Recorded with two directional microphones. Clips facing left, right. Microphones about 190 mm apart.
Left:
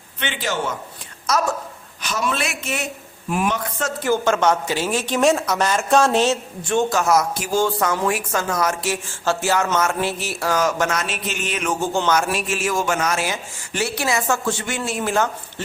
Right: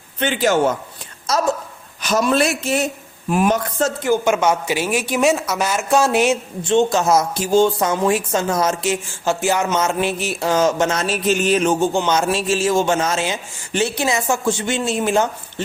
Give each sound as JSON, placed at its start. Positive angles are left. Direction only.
{"t": 0.2, "sound": "a man's voice", "side_deg": -40}
{"t": 1.3, "sound": "a woman's voice", "side_deg": -30}
{"t": 2.0, "sound": "speech", "side_deg": -40}
{"t": 4.0, "sound": "speech", "side_deg": -15}